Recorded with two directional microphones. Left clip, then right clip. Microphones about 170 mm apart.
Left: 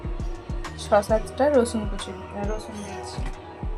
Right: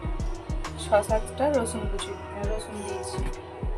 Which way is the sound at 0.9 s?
30° left (ahead or behind).